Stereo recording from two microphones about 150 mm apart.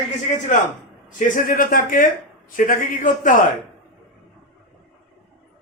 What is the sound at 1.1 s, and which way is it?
A man's voice, 60° left (ahead or behind).